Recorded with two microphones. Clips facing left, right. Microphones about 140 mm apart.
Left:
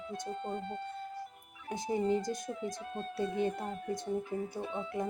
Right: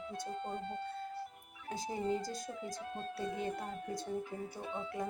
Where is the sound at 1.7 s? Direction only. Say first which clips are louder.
Left 5 dB; 20° left (ahead or behind).